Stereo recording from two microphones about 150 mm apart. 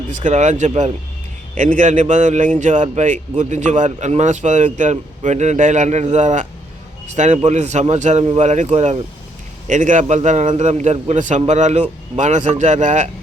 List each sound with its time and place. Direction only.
0.2 s a man's voice: 55° right (ahead or behind)